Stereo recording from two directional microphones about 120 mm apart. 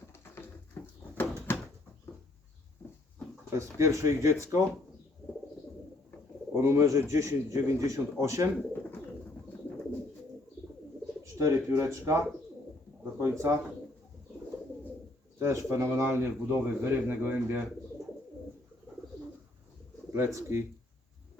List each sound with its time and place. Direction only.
0.1 s bird: 20° left (ahead or behind)
3.5 s a man's voice: 25° right (ahead or behind)
6.5 s a man's voice: 20° right (ahead or behind)
11.2 s a man's voice: 25° right (ahead or behind)
15.4 s a man's voice: 25° right (ahead or behind)
20.1 s a man's voice: 20° right (ahead or behind)